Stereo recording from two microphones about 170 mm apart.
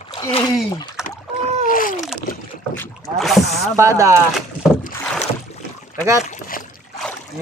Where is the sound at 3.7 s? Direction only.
15° right (ahead or behind).